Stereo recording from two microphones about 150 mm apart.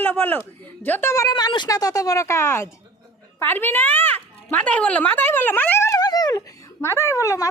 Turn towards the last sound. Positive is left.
turn(degrees=20)  # may be behind; listen again after turning